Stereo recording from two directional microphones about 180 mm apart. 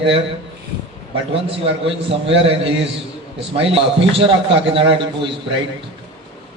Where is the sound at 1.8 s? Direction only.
30° right (ahead or behind).